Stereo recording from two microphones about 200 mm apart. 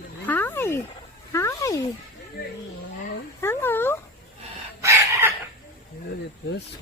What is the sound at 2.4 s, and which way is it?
Wild animals, 50° left (ahead or behind).